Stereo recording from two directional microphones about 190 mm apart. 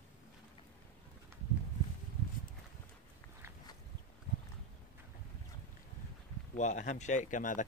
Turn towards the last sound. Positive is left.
turn(degrees=40)  # may be behind; listen again after turning